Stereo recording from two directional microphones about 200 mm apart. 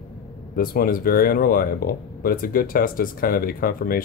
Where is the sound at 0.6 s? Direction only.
45° left (ahead or behind).